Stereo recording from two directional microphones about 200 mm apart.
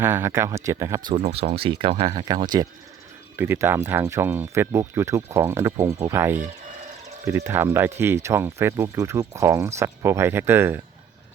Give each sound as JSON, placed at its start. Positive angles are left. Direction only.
{"t": 0.0, "sound": "speech", "side_deg": -10}
{"t": 1.1, "sound": "speech", "side_deg": -30}